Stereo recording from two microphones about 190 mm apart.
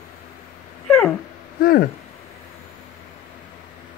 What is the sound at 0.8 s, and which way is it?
Dog, centre (ahead or behind).